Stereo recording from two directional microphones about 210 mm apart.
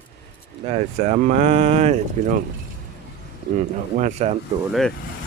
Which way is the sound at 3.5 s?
35° right (ahead or behind).